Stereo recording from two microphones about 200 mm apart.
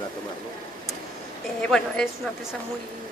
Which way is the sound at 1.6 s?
5° left (ahead or behind).